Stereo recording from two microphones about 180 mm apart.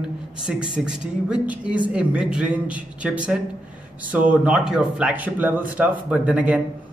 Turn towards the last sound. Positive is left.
turn(degrees=-5)  # may be behind; listen again after turning